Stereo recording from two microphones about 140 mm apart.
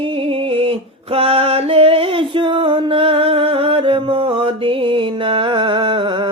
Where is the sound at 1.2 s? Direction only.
45° right (ahead or behind).